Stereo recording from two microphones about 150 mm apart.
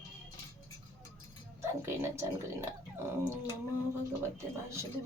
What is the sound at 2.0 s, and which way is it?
Speech, 20° right (ahead or behind).